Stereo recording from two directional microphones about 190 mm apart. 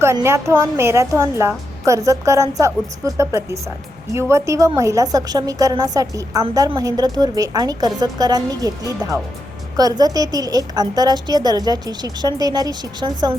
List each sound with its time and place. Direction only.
0.0 s a woman's voice: 15° right (ahead or behind)